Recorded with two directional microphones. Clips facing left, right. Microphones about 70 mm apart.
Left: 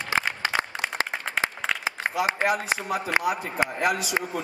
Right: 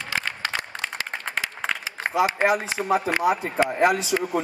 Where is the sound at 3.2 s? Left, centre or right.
Right.